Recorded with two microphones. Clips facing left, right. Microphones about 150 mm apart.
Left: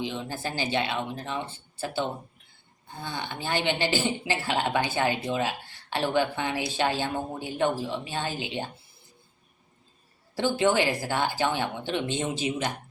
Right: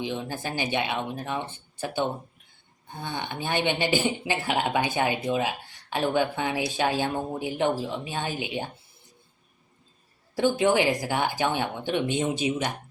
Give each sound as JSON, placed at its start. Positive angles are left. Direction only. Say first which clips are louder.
{"t": 0.0, "sound": "speech", "louder": "right 1 dB", "side_deg": -15}
{"t": 10.3, "sound": "speech", "louder": "right 2 dB", "side_deg": -15}